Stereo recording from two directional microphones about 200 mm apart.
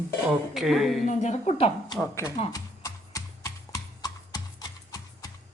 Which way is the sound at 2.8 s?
15° left (ahead or behind).